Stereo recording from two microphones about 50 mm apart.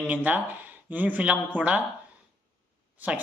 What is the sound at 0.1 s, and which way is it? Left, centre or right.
Speech, right.